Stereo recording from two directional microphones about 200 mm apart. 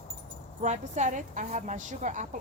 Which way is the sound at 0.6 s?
35° right (ahead or behind).